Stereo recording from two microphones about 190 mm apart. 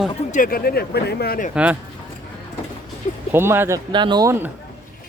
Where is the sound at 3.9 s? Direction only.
25° right (ahead or behind).